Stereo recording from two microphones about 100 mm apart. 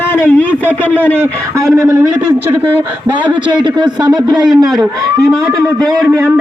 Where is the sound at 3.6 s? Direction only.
50° right (ahead or behind).